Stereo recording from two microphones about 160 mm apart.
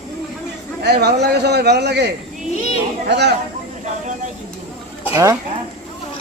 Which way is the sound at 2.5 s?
40° left (ahead or behind).